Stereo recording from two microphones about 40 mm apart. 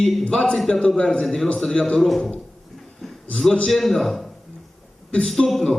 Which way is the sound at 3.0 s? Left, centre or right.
Centre.